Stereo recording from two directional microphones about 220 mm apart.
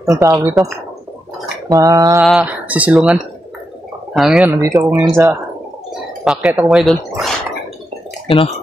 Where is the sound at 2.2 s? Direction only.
5° right (ahead or behind).